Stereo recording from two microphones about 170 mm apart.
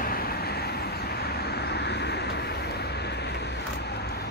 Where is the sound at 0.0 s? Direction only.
60° left (ahead or behind); by 3.4 s 80° left.